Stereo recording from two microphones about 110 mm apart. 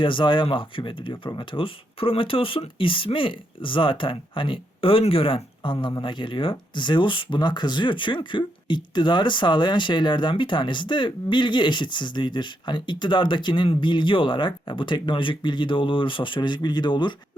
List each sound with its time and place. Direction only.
0.0 s speech: 50° left (ahead or behind)